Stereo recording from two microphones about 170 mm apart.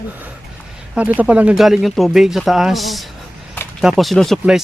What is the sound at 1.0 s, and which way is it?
Speech, 10° right (ahead or behind).